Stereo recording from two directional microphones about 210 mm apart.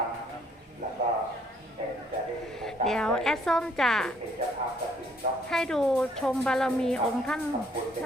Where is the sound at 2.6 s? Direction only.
Centre (ahead or behind).